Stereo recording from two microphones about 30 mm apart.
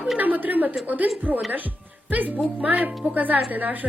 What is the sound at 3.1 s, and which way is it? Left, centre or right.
Speech, right.